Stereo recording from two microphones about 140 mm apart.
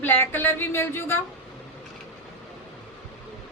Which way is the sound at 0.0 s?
15° left (ahead or behind).